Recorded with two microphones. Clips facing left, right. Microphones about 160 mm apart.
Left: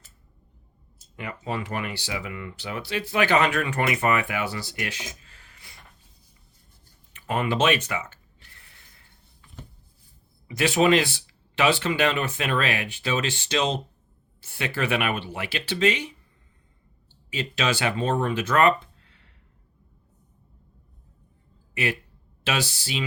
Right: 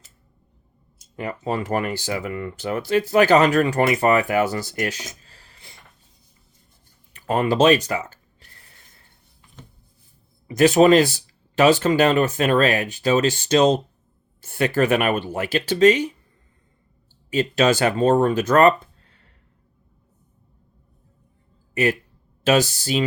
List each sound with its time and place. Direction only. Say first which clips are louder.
1.1 s speech: right 6 dB; 40° right (ahead or behind)
7.1 s a sound: right 5 dB; 40° right (ahead or behind)
10.5 s speech: right 7 dB; 45° right (ahead or behind)
17.2 s speech: right 8 dB; 45° right (ahead or behind)
21.8 s speech: right 7 dB; 45° right (ahead or behind)